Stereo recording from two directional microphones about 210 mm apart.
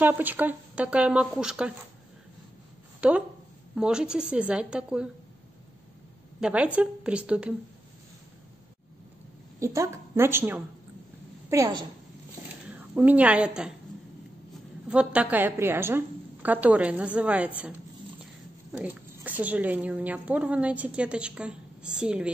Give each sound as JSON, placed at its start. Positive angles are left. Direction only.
{"t": 0.0, "sound": "a woman's voice", "side_deg": -10}
{"t": 3.0, "sound": "a woman's voice", "side_deg": -5}
{"t": 6.4, "sound": "a woman's voice", "side_deg": -5}
{"t": 9.6, "sound": "a woman's voice", "side_deg": -15}
{"t": 12.9, "sound": "a woman's voice", "side_deg": -10}
{"t": 14.9, "sound": "a woman's voice", "side_deg": -5}
{"t": 18.7, "sound": "a woman's voice", "side_deg": -5}